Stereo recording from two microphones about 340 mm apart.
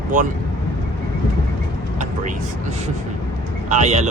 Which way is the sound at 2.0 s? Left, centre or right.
Centre.